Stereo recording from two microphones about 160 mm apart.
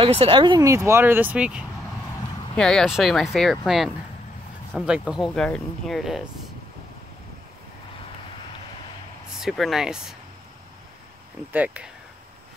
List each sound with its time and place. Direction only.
0.0 s speech: 35° right (ahead or behind); by 1.6 s 5° right (ahead or behind)
2.5 s speech: 5° left (ahead or behind)
9.4 s speech: centre (ahead or behind)
11.5 s speech: 10° right (ahead or behind)